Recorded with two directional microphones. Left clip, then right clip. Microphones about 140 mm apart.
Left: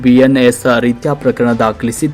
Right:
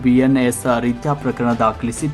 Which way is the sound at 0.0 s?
15° left (ahead or behind).